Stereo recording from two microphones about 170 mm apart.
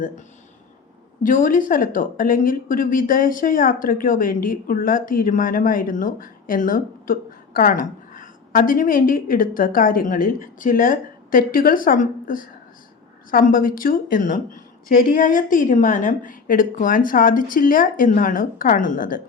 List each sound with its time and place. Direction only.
1.2 s a woman's voice: 50° left (ahead or behind)